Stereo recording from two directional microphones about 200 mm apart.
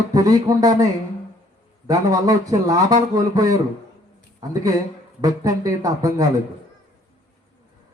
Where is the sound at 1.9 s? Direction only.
20° right (ahead or behind).